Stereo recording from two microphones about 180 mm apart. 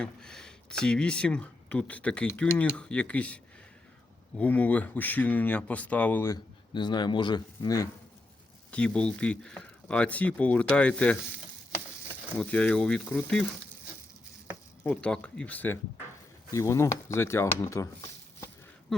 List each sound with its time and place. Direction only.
0.0 s speech: 5° left (ahead or behind); by 7.9 s 20° left (ahead or behind)
8.7 s speech: 5° left (ahead or behind)
12.4 s speech: 5° left (ahead or behind)
14.8 s speech: 5° left (ahead or behind)
18.9 s a sound: centre (ahead or behind)